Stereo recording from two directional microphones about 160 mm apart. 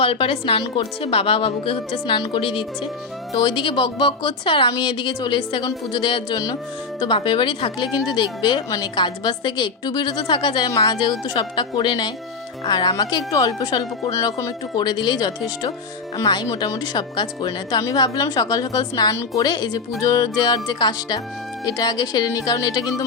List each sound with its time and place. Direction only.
0.0 s a woman's voice: 35° left (ahead or behind)